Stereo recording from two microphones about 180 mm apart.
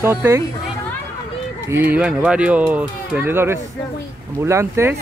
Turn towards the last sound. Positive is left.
turn(degrees=-15)  # may be behind; listen again after turning